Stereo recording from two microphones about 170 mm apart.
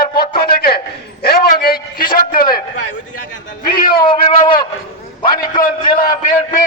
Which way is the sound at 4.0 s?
30° left (ahead or behind).